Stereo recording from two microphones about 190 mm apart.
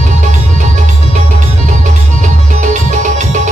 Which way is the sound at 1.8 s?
40° right (ahead or behind).